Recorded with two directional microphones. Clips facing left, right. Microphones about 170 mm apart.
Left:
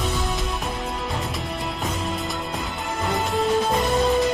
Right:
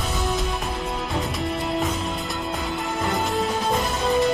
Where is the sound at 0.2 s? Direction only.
Centre (ahead or behind).